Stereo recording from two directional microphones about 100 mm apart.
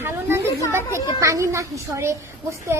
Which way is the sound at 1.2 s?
30° right (ahead or behind).